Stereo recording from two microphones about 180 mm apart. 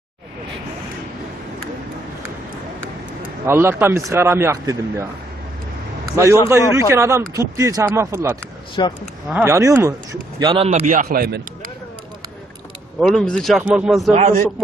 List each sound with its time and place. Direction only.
3.4 s speech: 15° right (ahead or behind)
6.7 s speech: 15° right (ahead or behind)
8.8 s speech: 25° left (ahead or behind)
9.3 s speech: 15° right (ahead or behind)
10.4 s a man's voice: 30° right (ahead or behind)
10.7 s a man's voice: 40° right (ahead or behind)
13.0 s speech: centre (ahead or behind)
14.2 s a man's voice: 45° right (ahead or behind)